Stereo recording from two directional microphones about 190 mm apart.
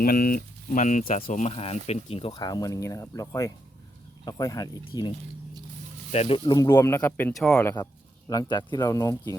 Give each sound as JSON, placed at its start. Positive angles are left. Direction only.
{"t": 0.0, "sound": "speech", "side_deg": 50}
{"t": 6.1, "sound": "speech", "side_deg": 30}
{"t": 8.3, "sound": "speech", "side_deg": 20}